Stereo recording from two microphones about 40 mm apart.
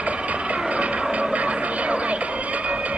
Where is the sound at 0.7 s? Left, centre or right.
Right.